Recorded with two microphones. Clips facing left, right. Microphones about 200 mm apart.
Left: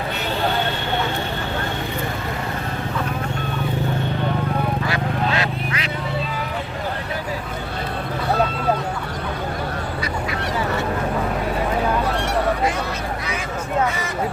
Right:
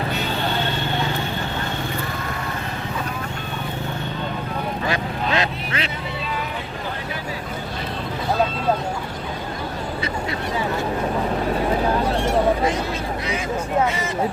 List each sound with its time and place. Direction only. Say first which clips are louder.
4.9 s vehicle: left 1 dB; 20° right (ahead or behind)